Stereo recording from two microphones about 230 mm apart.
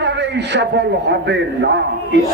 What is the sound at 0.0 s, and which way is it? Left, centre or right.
A man's voice, right.